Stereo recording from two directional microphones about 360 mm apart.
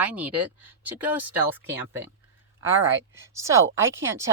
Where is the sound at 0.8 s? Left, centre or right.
Centre.